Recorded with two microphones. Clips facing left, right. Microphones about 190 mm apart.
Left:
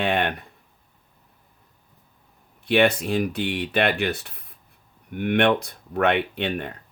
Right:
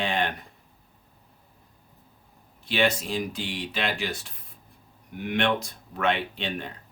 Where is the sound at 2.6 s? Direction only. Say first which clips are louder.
Left 6 dB; 60° left (ahead or behind).